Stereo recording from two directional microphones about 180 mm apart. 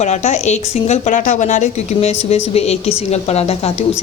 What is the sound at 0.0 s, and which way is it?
A woman's voice, 40° left (ahead or behind).